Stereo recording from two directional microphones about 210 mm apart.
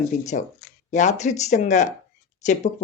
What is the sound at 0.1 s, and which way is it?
Speech, 35° left (ahead or behind).